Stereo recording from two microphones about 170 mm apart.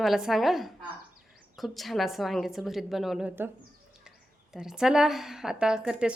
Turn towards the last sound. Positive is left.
turn(degrees=-5)  # may be behind; listen again after turning